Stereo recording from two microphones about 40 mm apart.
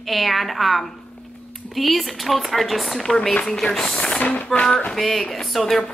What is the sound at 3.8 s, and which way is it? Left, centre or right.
Speech, left.